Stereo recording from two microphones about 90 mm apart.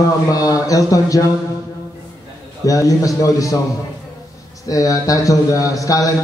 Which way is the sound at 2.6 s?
40° left (ahead or behind).